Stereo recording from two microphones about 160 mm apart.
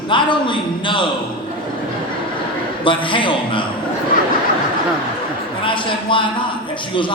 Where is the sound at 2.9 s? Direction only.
30° left (ahead or behind).